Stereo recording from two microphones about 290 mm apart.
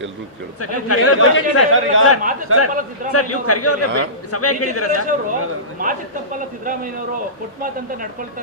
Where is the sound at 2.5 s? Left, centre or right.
Right.